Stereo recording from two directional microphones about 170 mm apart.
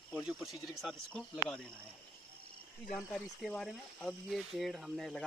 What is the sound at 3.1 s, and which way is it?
Speech, centre (ahead or behind).